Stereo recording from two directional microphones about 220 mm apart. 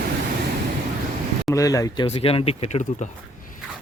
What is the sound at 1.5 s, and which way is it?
Speech, 15° left (ahead or behind).